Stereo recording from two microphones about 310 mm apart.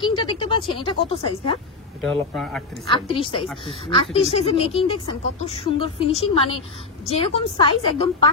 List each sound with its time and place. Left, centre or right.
0.0 s speech: centre
2.3 s speech: centre
2.9 s speech: centre